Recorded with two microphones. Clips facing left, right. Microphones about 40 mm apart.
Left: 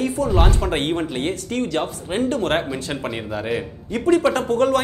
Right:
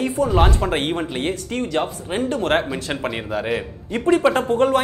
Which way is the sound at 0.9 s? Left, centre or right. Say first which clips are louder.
Left 1 dB; centre.